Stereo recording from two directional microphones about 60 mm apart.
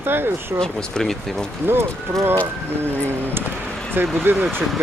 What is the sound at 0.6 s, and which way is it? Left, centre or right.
Speech, centre.